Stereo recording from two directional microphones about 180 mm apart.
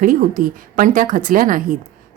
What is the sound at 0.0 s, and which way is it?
Speech, 50° right (ahead or behind).